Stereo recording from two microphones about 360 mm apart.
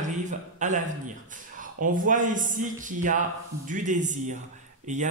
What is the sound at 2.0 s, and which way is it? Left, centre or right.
Speech, right.